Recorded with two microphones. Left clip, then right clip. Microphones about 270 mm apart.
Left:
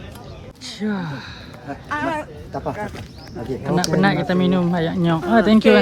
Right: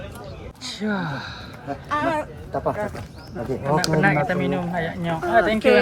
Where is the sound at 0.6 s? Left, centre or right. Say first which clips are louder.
Even; centre.